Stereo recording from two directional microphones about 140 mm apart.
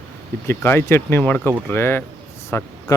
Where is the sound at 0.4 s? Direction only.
15° left (ahead or behind).